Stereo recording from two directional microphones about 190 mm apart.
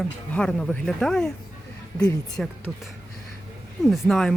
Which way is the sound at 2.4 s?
5° left (ahead or behind).